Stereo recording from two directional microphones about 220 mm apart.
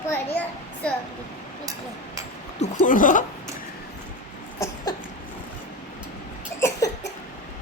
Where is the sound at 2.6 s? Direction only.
35° left (ahead or behind).